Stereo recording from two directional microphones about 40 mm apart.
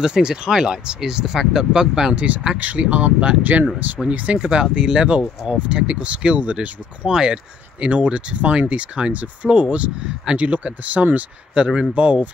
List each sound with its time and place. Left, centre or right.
0.0 s speech: centre
2.1 s speech: right
4.4 s speech: right
7.1 s speech: right
7.8 s speech: right
10.4 s speech: right
11.5 s speech: right
11.9 s speech: right